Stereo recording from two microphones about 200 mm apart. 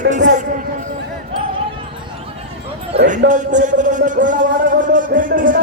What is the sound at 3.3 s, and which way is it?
Speech, 40° right (ahead or behind).